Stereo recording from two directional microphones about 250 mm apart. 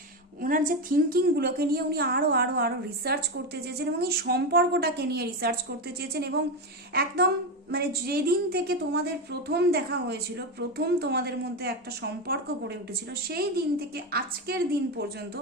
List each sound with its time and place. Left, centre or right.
0.4 s a woman's voice: right
13.2 s a woman's voice: right